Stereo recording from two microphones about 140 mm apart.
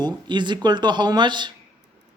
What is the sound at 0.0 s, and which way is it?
Speech, 35° right (ahead or behind).